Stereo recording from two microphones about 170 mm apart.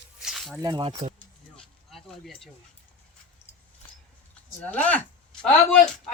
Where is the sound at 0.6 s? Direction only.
25° right (ahead or behind).